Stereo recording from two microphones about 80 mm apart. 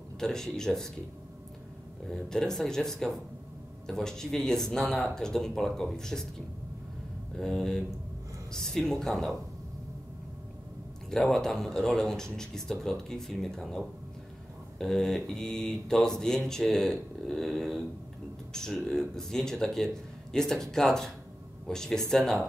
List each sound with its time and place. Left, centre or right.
0.2 s speech: centre
2.0 s speech: centre
7.3 s speech: centre
11.1 s speech: centre